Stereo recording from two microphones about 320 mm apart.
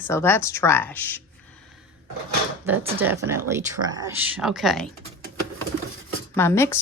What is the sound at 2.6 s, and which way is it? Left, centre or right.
Speech, centre.